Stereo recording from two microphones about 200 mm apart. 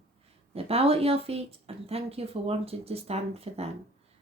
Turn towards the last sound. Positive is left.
turn(degrees=-30)  # may be behind; listen again after turning